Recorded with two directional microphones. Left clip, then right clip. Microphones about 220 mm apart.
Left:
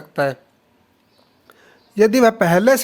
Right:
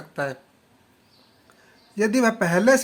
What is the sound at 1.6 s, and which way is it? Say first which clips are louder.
Speech: left 9 dB; 40° left (ahead or behind).